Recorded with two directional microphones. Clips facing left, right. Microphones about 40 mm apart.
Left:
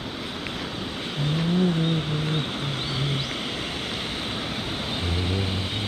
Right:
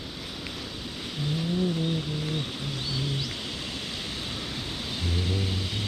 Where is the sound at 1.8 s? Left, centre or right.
Left.